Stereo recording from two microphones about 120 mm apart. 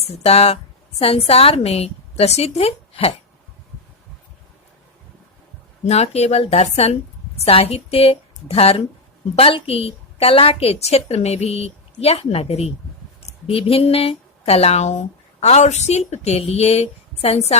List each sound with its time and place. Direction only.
0.0 s a woman's voice: 60° left (ahead or behind)
5.8 s speech: 65° left (ahead or behind)